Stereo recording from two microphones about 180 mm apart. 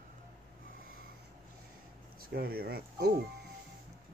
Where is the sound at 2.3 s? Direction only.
55° right (ahead or behind).